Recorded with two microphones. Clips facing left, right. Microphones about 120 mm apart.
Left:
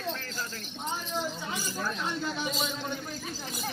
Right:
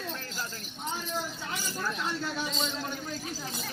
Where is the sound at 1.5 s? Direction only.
10° left (ahead or behind).